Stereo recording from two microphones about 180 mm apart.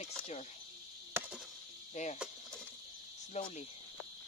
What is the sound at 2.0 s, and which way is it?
Speech, 40° left (ahead or behind).